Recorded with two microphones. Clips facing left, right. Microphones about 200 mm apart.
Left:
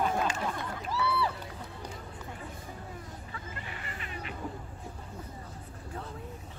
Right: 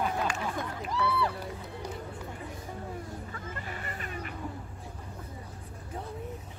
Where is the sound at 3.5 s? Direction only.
45° right (ahead or behind).